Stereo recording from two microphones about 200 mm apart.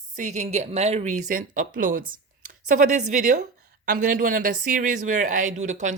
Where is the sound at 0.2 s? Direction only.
35° right (ahead or behind).